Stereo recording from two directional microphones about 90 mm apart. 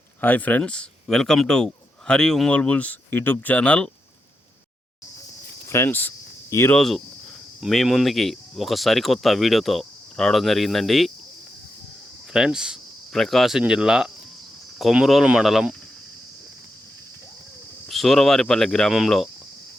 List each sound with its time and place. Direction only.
0.2 s a man's voice: 20° left (ahead or behind)
5.6 s speech: 30° left (ahead or behind)
6.5 s speech: 35° left (ahead or behind)
7.6 s speech: centre (ahead or behind)
12.3 s speech: 5° right (ahead or behind)
17.8 s speech: centre (ahead or behind)